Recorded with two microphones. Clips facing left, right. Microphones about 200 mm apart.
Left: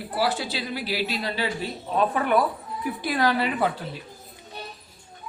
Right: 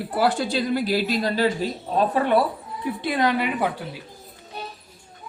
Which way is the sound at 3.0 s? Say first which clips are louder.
Right 1 dB; 20° right (ahead or behind).